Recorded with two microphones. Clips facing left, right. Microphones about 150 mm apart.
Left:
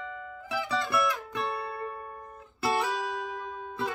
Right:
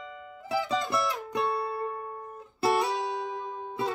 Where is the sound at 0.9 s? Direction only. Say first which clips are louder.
Left 1 dB; 30° right (ahead or behind).